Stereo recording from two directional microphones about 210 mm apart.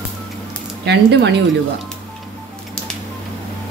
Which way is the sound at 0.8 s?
55° right (ahead or behind).